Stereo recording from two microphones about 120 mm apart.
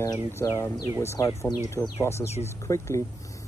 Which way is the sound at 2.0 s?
20° left (ahead or behind).